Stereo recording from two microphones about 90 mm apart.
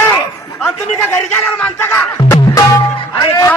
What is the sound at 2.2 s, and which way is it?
Music, 35° left (ahead or behind).